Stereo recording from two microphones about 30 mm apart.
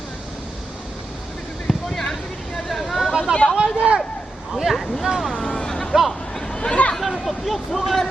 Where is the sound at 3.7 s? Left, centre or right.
Right.